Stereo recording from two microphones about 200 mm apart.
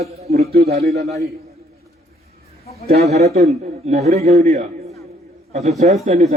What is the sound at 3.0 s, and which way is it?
A man's voice, 35° right (ahead or behind).